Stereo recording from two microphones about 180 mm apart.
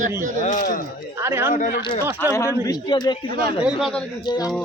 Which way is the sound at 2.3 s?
20° left (ahead or behind).